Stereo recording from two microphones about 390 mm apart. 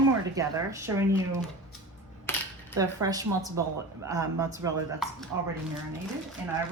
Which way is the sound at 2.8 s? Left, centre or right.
Centre.